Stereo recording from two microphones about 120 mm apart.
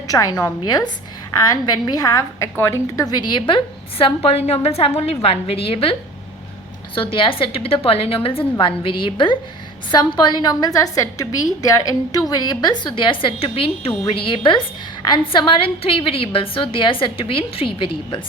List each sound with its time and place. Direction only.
0.1 s a woman's voice: 30° left (ahead or behind); by 18.2 s 45° left (ahead or behind)